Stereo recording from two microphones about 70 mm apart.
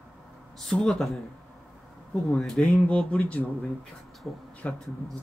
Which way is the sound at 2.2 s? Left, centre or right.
Centre.